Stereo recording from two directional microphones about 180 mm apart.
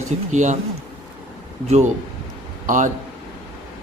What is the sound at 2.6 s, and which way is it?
Speech, 45° right (ahead or behind).